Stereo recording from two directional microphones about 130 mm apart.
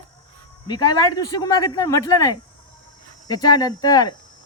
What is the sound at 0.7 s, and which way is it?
Speech, 30° left (ahead or behind).